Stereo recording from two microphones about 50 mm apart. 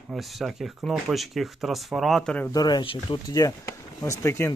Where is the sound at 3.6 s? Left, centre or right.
Left.